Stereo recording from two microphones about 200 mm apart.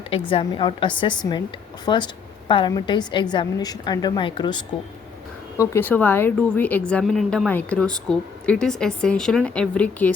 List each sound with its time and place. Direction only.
0.3 s a woman's voice: 25° left (ahead or behind)
5.5 s a woman's voice: 10° left (ahead or behind)